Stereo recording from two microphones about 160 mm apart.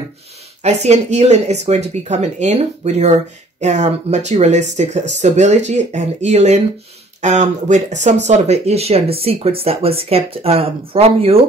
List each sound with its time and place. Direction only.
0.7 s speech: 45° right (ahead or behind)